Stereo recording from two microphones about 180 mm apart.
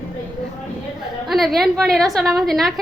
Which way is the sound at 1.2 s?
Centre (ahead or behind).